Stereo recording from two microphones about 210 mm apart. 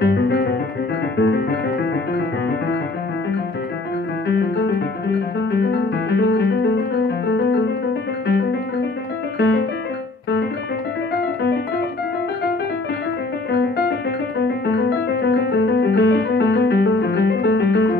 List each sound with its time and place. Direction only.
0.0 s music: 50° left (ahead or behind)
4.3 s music: 55° left (ahead or behind)
7.2 s piano: 55° left (ahead or behind)
8.3 s music: 55° left (ahead or behind)
9.4 s piano: 55° left (ahead or behind)
13.5 s piano: 50° left (ahead or behind)